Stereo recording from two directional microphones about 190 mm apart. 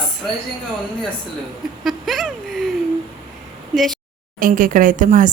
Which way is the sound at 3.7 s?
Centre (ahead or behind).